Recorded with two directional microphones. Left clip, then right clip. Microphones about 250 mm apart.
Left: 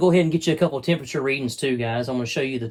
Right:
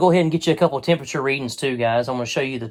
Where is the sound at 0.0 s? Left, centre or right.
Right.